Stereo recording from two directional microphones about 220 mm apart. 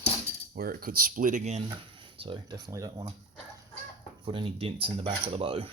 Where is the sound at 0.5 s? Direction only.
40° right (ahead or behind).